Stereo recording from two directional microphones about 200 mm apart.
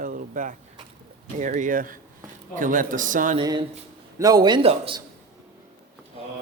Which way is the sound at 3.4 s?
25° right (ahead or behind).